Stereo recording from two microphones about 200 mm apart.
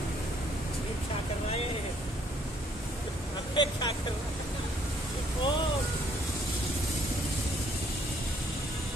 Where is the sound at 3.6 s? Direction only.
20° left (ahead or behind).